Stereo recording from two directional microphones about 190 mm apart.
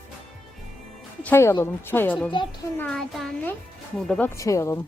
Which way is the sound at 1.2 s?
10° left (ahead or behind).